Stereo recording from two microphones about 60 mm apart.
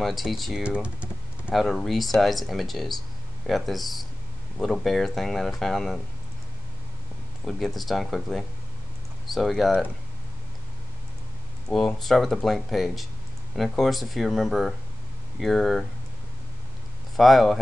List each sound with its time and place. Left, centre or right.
0.0 s speech: centre
0.7 s typing: centre
1.5 s speech: centre
7.4 s speech: centre
11.7 s speech: centre
17.2 s speech: centre